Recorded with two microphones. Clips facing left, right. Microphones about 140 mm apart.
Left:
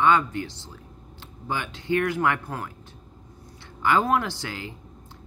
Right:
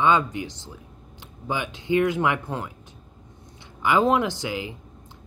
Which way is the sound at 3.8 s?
15° right (ahead or behind).